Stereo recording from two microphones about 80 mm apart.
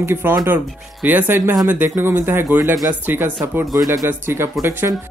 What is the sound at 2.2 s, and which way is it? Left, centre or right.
Speech, right.